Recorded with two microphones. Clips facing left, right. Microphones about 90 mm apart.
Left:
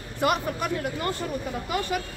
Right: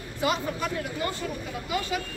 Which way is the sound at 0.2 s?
55° left (ahead or behind).